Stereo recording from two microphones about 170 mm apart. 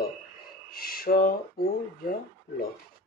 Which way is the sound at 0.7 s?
60° left (ahead or behind).